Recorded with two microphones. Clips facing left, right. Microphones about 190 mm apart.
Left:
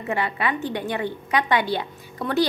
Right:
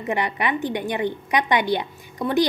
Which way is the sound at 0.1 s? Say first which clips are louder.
Right 1 dB; 15° right (ahead or behind).